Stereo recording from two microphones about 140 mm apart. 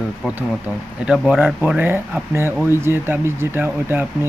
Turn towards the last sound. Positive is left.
turn(degrees=-15)  # may be behind; listen again after turning